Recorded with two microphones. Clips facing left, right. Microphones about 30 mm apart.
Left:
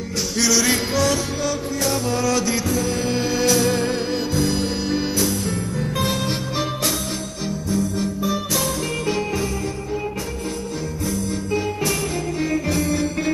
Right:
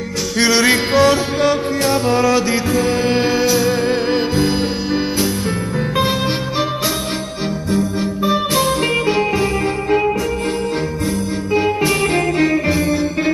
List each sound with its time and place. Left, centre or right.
0.4 s music: right
3.3 s music: centre
3.9 s music: right
7.7 s music: right
11.5 s music: right